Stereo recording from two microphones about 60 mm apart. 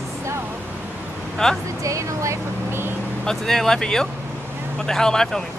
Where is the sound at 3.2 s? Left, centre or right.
Centre.